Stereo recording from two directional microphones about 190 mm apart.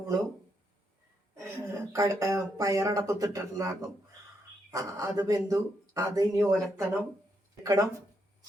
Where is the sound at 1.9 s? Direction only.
15° right (ahead or behind).